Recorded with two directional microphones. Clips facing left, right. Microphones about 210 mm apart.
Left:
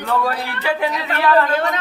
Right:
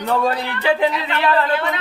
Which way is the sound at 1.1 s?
45° left (ahead or behind).